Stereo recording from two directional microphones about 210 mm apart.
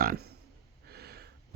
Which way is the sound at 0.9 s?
50° right (ahead or behind).